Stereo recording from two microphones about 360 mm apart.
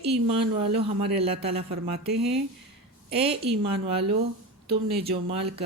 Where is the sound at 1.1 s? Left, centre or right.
Centre.